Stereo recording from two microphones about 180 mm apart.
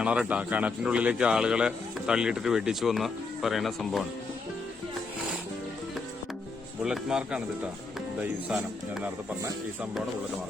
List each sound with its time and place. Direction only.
0.0 s a man's voice: 5° right (ahead or behind)
6.8 s a man's voice: 5° right (ahead or behind)